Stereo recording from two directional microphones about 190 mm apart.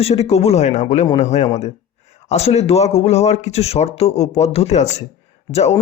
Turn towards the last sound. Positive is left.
turn(degrees=35)  # may be behind; listen again after turning